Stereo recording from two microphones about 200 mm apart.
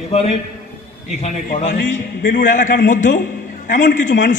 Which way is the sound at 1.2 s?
40° left (ahead or behind).